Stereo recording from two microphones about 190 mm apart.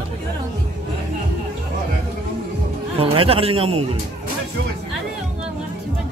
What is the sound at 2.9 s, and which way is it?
A man's voice, 30° right (ahead or behind).